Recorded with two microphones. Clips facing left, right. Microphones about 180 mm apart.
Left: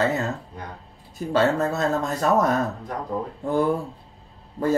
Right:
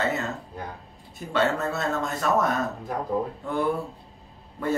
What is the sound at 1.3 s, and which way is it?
Speech, 35° left (ahead or behind).